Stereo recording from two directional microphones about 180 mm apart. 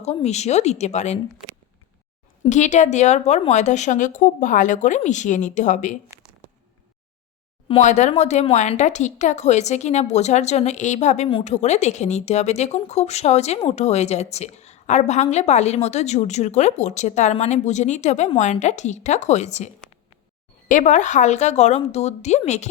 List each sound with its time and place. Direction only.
0.0 s speech: 35° left (ahead or behind)
2.4 s a woman's voice: 40° left (ahead or behind)
7.7 s speech: 40° left (ahead or behind)